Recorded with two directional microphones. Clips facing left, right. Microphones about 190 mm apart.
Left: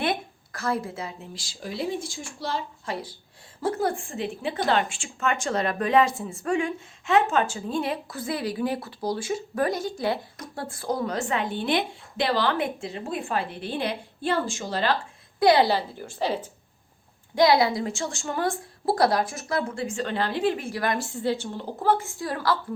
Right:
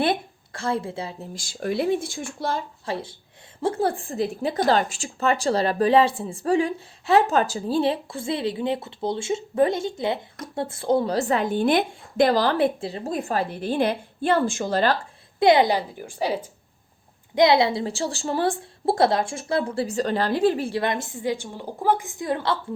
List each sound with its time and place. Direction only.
0.0 s a woman's voice: 30° right (ahead or behind)
1.3 s speech: 50° right (ahead or behind)
2.8 s a woman's voice: 25° right (ahead or behind); by 14.9 s 50° right (ahead or behind)
15.4 s a woman's voice: 20° right (ahead or behind)
17.3 s a woman's voice: 20° right (ahead or behind)